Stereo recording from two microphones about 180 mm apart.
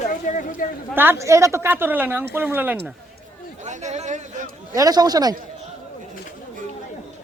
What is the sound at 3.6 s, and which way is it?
Speech, 40° right (ahead or behind).